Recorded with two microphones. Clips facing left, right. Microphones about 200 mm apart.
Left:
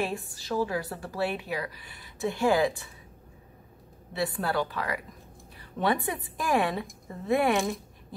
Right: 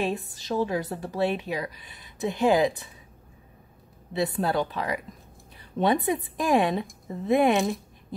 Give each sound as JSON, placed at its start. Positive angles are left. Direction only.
{"t": 0.0, "sound": "a woman's voice", "side_deg": -20}
{"t": 4.1, "sound": "a woman's voice", "side_deg": -20}